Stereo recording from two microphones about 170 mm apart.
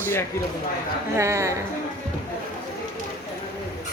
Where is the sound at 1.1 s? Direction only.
15° right (ahead or behind).